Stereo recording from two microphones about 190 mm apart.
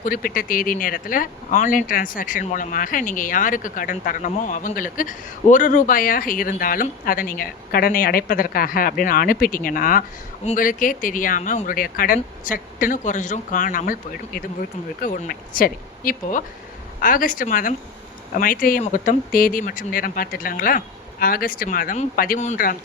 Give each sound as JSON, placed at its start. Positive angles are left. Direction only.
{"t": 0.0, "sound": "speech", "side_deg": 50}